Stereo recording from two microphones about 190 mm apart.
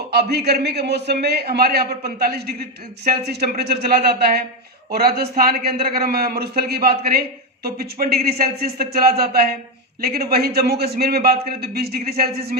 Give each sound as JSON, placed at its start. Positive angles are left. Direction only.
{"t": 0.1, "sound": "a man's voice", "side_deg": -60}